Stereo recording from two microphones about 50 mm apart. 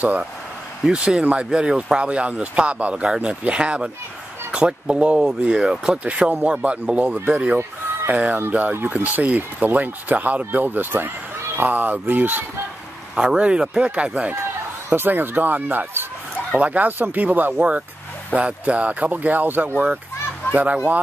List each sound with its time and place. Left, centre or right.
0.8 s speech: centre
8.1 s speech: right
13.1 s speech: centre
14.9 s speech: right
16.5 s speech: right
17.6 s speech: right